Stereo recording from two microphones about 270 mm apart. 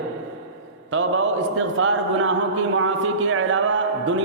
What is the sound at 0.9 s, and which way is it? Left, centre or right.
A man's voice, right.